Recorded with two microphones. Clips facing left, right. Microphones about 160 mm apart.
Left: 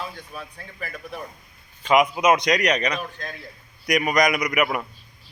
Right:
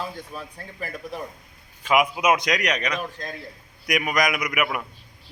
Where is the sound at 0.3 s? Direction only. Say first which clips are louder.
Right 1 dB; 35° right (ahead or behind).